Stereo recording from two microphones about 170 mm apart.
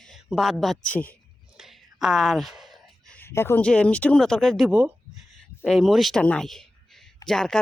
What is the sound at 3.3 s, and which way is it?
Speech, 15° left (ahead or behind).